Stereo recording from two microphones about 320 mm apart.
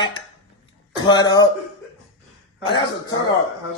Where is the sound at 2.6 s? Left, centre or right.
Centre.